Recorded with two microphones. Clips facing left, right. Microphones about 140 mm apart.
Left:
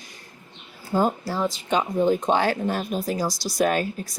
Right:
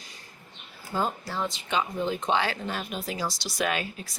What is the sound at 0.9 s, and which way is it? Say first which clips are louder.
Speech: left 7 dB; 40° left (ahead or behind).